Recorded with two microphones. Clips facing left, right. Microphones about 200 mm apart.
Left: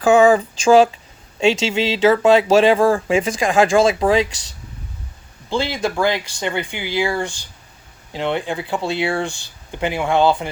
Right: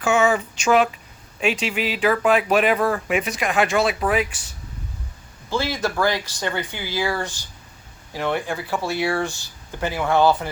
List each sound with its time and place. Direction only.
0.0 s speech: 35° left (ahead or behind)
5.5 s speech: 20° left (ahead or behind)